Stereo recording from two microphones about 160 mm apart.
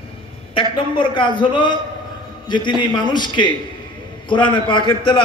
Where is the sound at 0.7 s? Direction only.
30° left (ahead or behind).